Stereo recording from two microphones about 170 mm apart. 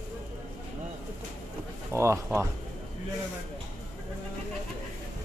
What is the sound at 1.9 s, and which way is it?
Speech, 15° right (ahead or behind).